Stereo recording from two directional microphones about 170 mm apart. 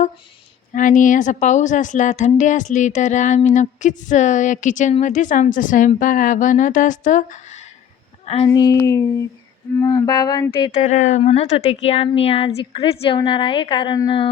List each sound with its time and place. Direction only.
0.7 s a woman's voice: 50° left (ahead or behind)
8.3 s music: 25° left (ahead or behind)
10.8 s a woman's voice: 40° left (ahead or behind); by 14.3 s 25° left (ahead or behind)